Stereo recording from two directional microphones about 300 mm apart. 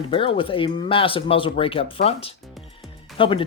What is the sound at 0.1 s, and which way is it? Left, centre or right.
Speech, centre.